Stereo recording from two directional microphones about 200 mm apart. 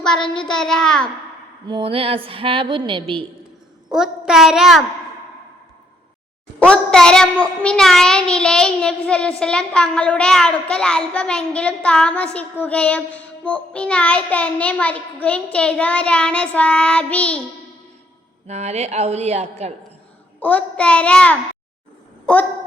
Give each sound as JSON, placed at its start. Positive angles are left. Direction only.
{"t": 0.0, "sound": "a child's voice", "side_deg": 5}
{"t": 1.6, "sound": "a woman's voice", "side_deg": -25}
{"t": 3.9, "sound": "a child's voice", "side_deg": 0}
{"t": 6.6, "sound": "a child's voice", "side_deg": 5}
{"t": 18.4, "sound": "a woman's voice", "side_deg": -35}
{"t": 20.4, "sound": "a child's voice", "side_deg": 5}